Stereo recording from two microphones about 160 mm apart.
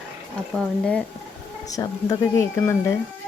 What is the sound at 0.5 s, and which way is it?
Speech, 5° left (ahead or behind).